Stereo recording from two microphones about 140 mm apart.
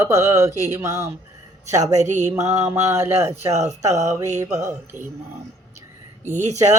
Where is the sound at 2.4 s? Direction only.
20° right (ahead or behind).